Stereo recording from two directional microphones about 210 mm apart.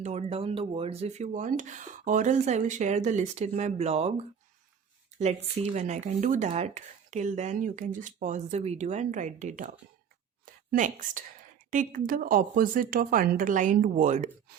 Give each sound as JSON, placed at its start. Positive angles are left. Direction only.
{"t": 0.0, "sound": "speech", "side_deg": -30}
{"t": 5.2, "sound": "speech", "side_deg": -30}
{"t": 10.4, "sound": "a sound", "side_deg": -40}
{"t": 11.7, "sound": "speech", "side_deg": -40}